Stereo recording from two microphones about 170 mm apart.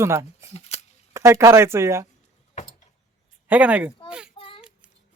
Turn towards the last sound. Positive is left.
turn(degrees=30)  # may be behind; listen again after turning